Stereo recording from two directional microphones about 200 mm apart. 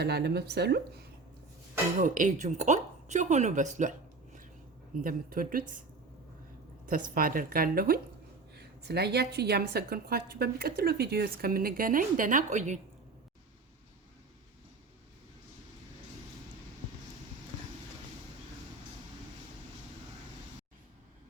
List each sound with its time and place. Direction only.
0.0 s speech: 55° right (ahead or behind)
2.0 s a woman's voice: 40° right (ahead or behind)
5.0 s a woman's voice: 45° right (ahead or behind)
7.1 s a woman's voice: 45° right (ahead or behind)